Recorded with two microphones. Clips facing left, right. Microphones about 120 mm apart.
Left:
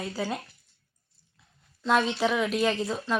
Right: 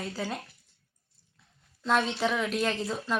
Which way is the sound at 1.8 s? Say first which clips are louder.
Left 2 dB; 5° left (ahead or behind).